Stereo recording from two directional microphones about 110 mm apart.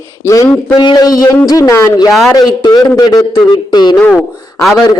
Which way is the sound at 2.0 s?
Centre (ahead or behind).